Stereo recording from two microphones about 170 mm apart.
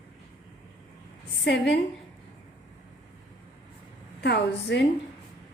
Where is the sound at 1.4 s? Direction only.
90° left.